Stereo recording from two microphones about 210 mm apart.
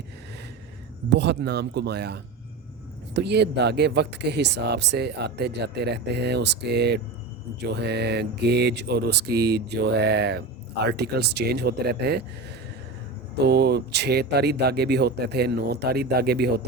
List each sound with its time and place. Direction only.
1.1 s speech: 55° right (ahead or behind)
13.4 s speech: 50° right (ahead or behind)